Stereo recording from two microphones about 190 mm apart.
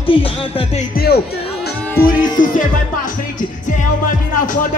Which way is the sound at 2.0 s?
45° left (ahead or behind).